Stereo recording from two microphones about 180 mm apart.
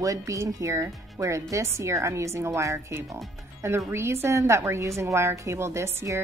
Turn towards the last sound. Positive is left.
turn(degrees=-15)  # may be behind; listen again after turning